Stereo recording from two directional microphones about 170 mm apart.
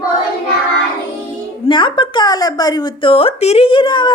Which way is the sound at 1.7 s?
30° left (ahead or behind).